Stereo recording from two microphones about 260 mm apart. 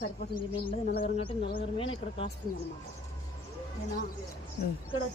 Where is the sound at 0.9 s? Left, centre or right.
Left.